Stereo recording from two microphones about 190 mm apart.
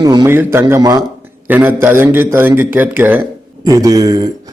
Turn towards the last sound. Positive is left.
turn(degrees=-20)  # may be behind; listen again after turning